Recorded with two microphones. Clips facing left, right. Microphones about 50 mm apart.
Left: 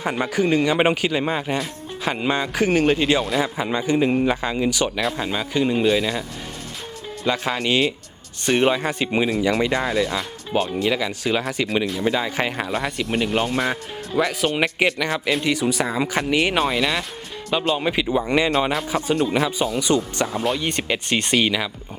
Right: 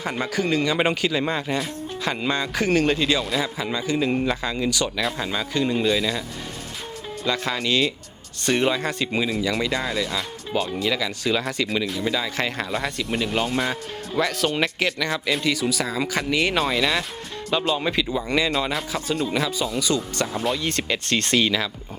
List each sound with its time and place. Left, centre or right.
0.0 s speech: centre
4.1 s speech: centre
4.9 s speech: centre
5.3 s speech: centre
7.3 s speech: centre
11.9 s speech: left; by 17.1 s centre
17.5 s speech: centre
19.1 s speech: left
20.1 s speech: centre
20.6 s speech: centre